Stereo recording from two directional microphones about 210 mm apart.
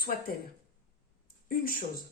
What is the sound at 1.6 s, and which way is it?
Speech, 40° left (ahead or behind).